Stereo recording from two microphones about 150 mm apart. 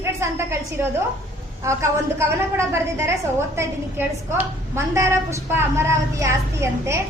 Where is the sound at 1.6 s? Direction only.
20° right (ahead or behind).